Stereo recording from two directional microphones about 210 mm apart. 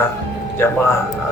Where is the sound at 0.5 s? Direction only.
10° left (ahead or behind).